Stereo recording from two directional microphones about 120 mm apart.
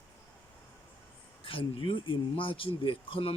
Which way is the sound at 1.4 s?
50° left (ahead or behind).